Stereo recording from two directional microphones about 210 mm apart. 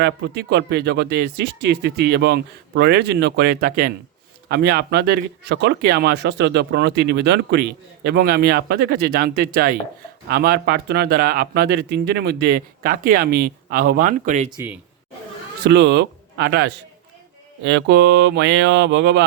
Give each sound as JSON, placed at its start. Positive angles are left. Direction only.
{"t": 0.0, "sound": "speech", "side_deg": -50}
{"t": 14.5, "sound": "speech", "side_deg": -10}
{"t": 15.6, "sound": "speech", "side_deg": -55}
{"t": 17.6, "sound": "a sound", "side_deg": -60}